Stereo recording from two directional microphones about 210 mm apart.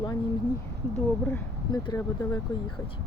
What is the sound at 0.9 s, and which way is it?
Speech, 5° left (ahead or behind).